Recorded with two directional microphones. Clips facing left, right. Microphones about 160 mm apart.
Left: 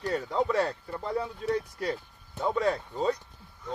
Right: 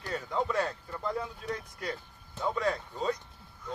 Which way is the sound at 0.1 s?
35° left (ahead or behind).